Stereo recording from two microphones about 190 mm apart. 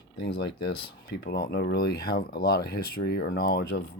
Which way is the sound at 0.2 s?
55° left (ahead or behind).